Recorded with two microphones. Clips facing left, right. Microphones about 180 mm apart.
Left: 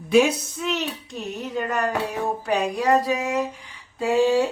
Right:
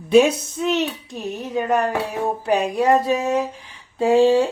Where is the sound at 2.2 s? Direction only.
20° right (ahead or behind).